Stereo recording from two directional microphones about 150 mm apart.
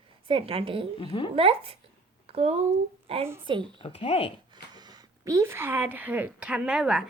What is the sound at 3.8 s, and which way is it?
Speech, 40° left (ahead or behind).